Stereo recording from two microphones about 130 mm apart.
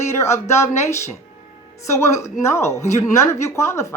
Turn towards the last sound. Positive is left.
turn(degrees=20)  # may be behind; listen again after turning